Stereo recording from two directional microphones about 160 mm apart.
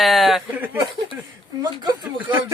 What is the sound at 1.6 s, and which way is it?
Speech, 25° right (ahead or behind).